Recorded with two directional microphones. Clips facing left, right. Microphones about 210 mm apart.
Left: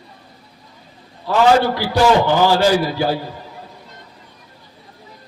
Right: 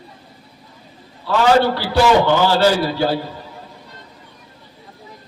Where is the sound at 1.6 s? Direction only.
15° left (ahead or behind).